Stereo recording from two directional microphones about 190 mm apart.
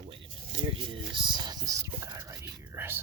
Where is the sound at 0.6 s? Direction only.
25° right (ahead or behind).